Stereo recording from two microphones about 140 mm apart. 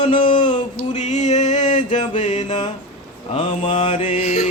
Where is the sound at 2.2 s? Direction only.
60° left (ahead or behind).